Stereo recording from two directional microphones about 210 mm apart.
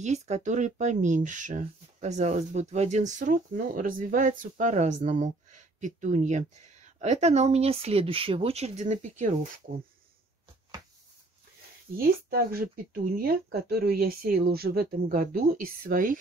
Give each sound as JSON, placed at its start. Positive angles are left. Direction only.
{"t": 0.0, "sound": "speech", "side_deg": -35}
{"t": 12.0, "sound": "speech", "side_deg": -45}